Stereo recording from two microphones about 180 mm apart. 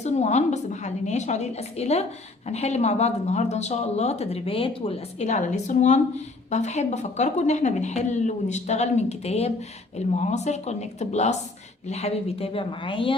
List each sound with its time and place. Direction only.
0.0 s speech: 40° left (ahead or behind)